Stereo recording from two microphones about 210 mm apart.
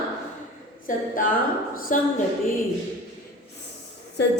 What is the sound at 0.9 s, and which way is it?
Speech, 40° left (ahead or behind).